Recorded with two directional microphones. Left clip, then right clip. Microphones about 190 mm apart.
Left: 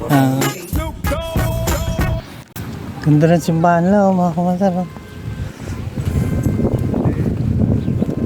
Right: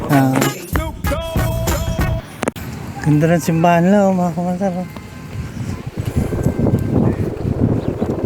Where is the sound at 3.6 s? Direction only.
5° right (ahead or behind).